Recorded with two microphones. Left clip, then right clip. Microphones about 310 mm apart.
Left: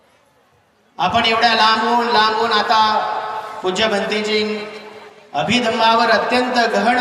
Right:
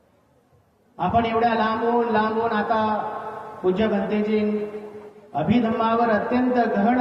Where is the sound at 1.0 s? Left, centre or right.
Left.